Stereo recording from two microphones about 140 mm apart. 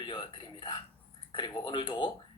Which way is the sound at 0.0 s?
35° left (ahead or behind).